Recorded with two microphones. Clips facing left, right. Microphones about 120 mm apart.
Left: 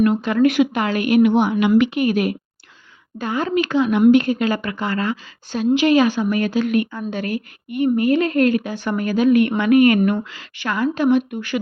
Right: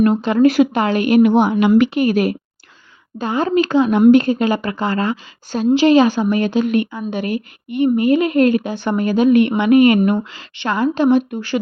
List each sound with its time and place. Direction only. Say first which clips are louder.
0.0 s speech: right 3 dB; 30° right (ahead or behind)
6.9 s a woman's voice: right 3 dB; 15° right (ahead or behind); by 11.6 s 30° right (ahead or behind)